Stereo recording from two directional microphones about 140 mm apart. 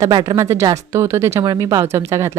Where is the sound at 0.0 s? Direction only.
30° right (ahead or behind).